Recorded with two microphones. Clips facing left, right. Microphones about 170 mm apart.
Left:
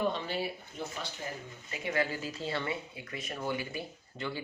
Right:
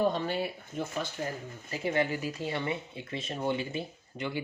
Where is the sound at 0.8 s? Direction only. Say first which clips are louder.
Right 6 dB; 55° right (ahead or behind).